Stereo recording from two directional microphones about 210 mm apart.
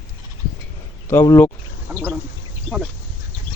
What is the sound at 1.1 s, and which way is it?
Speech, 15° left (ahead or behind).